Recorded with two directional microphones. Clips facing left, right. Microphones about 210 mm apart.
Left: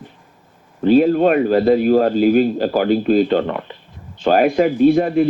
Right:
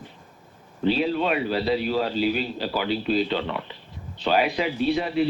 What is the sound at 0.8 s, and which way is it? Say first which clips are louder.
A man's voice: left 10 dB; 50° left (ahead or behind).